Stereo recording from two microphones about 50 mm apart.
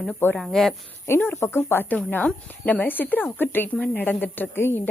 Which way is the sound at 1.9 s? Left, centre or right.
Left.